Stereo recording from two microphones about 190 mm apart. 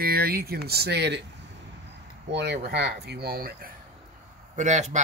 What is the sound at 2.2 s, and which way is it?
Speech, 65° right (ahead or behind).